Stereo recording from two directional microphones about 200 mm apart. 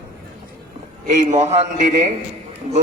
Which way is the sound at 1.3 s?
35° right (ahead or behind).